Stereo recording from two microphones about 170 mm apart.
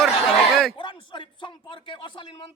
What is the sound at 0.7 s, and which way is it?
Speech, 30° left (ahead or behind).